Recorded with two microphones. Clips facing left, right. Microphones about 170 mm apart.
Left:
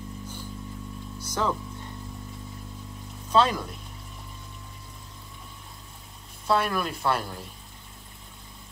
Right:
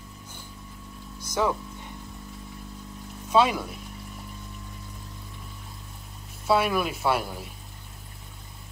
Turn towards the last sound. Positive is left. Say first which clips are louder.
# right 2 dB
turn(degrees=-5)  # may be behind; listen again after turning